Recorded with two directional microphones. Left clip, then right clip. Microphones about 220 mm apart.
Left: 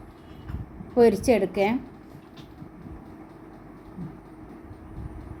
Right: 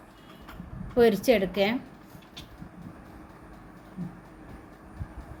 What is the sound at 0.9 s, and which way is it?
Speech, 10° right (ahead or behind).